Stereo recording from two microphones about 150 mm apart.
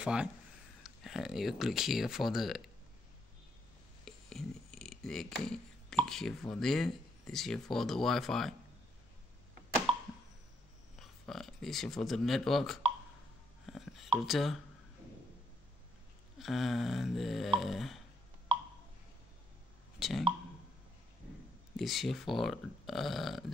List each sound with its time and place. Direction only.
0.0 s speech: 5° right (ahead or behind)
4.0 s speech: 5° left (ahead or behind)
9.9 s a sound: 35° right (ahead or behind)
11.0 s speech: centre (ahead or behind)
13.7 s hiccup: centre (ahead or behind)
14.2 s speech: centre (ahead or behind)
16.3 s speech: centre (ahead or behind)
20.0 s a sound: centre (ahead or behind)
21.7 s speech: centre (ahead or behind)